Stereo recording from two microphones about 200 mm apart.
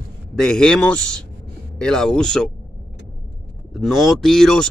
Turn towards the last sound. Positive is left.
turn(degrees=0)  # may be behind; listen again after turning